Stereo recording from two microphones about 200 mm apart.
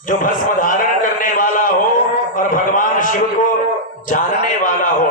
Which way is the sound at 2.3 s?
40° left (ahead or behind).